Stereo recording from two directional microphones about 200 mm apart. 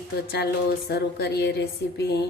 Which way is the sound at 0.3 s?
55° left (ahead or behind).